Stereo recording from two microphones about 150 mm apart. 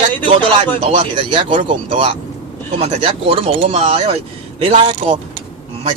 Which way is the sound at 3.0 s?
40° right (ahead or behind).